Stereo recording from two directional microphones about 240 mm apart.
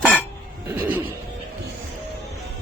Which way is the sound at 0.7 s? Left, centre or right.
Centre.